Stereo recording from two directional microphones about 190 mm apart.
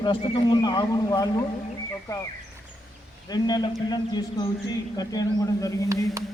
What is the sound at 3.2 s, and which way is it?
Speech, 20° left (ahead or behind).